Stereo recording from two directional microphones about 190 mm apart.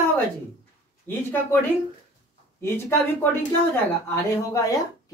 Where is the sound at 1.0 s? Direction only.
10° left (ahead or behind).